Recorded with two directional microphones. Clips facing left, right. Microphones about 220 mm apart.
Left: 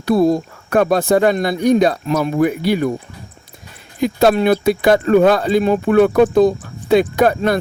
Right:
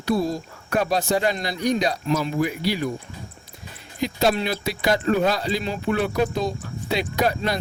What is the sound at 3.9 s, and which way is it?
Speech, 55° left (ahead or behind).